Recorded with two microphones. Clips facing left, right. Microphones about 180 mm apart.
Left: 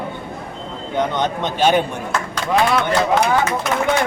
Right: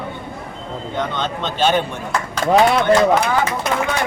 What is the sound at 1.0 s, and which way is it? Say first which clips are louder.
Speech: left 4 dB; 15° left (ahead or behind).